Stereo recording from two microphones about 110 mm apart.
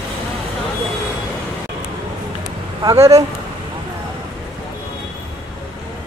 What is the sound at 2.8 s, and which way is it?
Speech, 30° right (ahead or behind).